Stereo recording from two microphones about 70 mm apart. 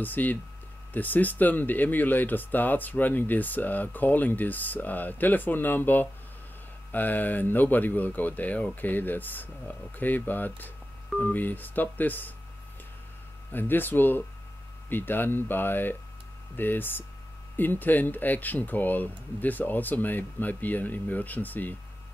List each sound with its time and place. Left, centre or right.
0.0 s speech: left
13.5 s speech: left